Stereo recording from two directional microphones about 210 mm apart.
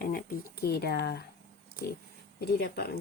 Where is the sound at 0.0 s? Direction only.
45° left (ahead or behind).